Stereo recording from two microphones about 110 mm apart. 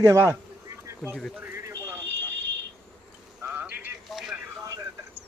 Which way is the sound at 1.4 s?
25° right (ahead or behind).